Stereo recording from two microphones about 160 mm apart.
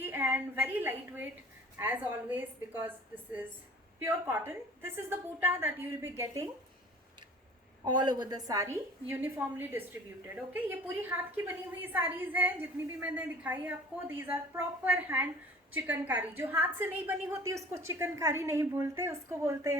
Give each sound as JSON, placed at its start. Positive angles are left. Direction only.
{"t": 0.0, "sound": "a woman's voice", "side_deg": -15}
{"t": 4.0, "sound": "a woman's voice", "side_deg": -10}
{"t": 7.9, "sound": "a woman's voice", "side_deg": -25}